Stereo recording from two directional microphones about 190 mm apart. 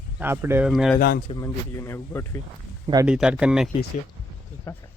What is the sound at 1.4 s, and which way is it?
Speech, 15° left (ahead or behind).